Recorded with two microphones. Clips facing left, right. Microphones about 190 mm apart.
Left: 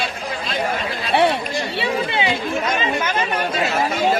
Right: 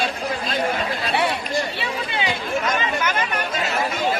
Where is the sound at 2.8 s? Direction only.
25° left (ahead or behind).